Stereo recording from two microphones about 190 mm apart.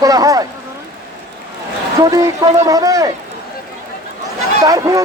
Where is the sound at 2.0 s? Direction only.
20° right (ahead or behind).